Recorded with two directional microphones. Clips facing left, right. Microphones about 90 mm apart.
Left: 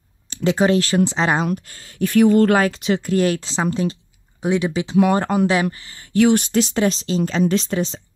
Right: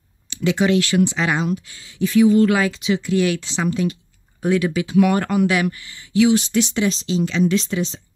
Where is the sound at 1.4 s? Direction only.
50° left (ahead or behind); by 4.0 s 30° left (ahead or behind).